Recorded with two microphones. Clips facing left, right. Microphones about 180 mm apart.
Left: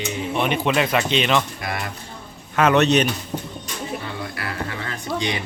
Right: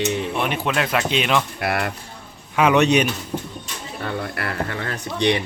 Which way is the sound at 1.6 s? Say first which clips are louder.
Right 6 dB; 65° right (ahead or behind).